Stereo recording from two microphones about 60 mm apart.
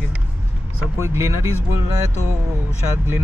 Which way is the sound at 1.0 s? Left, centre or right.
Right.